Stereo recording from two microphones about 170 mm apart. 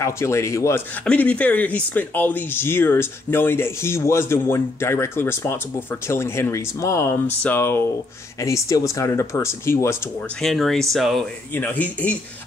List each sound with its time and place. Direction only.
0.0 s speech: 15° left (ahead or behind)
10.4 s speech: centre (ahead or behind)